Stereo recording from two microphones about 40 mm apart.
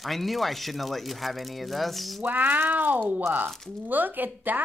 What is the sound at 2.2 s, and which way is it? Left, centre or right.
Speech, right.